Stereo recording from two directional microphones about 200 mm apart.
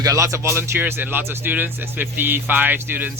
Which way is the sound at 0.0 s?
15° right (ahead or behind).